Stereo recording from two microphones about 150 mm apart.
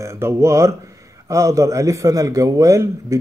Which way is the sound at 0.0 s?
15° right (ahead or behind).